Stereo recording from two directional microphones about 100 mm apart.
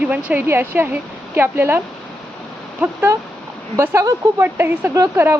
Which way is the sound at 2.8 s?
25° right (ahead or behind).